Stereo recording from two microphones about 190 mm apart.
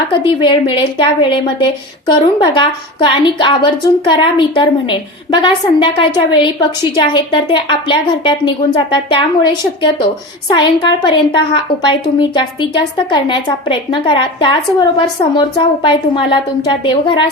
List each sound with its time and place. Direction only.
0.3 s a woman's voice: 25° left (ahead or behind)